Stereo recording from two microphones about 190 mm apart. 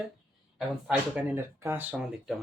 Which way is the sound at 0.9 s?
10° right (ahead or behind).